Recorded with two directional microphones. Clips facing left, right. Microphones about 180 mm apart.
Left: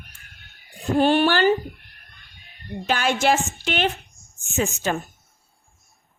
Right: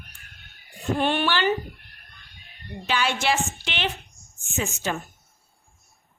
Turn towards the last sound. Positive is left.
turn(degrees=45)  # may be behind; listen again after turning